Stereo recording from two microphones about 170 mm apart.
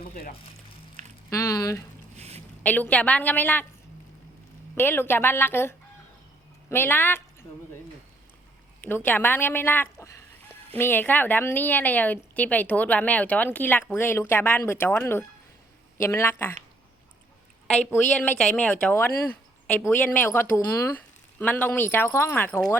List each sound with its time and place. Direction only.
0.1 s speech: 55° left (ahead or behind)
1.3 s speech: 20° left (ahead or behind)
2.1 s a sound: 40° right (ahead or behind)
2.6 s a woman's voice: 10° left (ahead or behind)
4.7 s a woman's voice: 10° left (ahead or behind)
8.8 s a woman's voice: 10° left (ahead or behind)
17.7 s a woman's voice: 5° left (ahead or behind)